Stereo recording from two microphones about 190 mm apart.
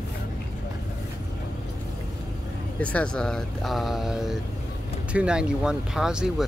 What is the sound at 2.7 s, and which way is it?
Speech, 5° left (ahead or behind).